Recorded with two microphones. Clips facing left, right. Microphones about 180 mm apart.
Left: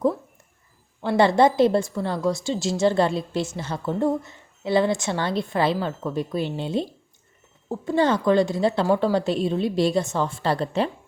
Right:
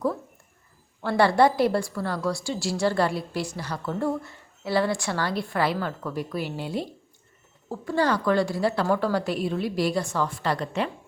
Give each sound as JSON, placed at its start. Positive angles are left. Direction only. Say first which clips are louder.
{"t": 1.0, "sound": "a woman's voice", "louder": "left 2 dB", "side_deg": 20}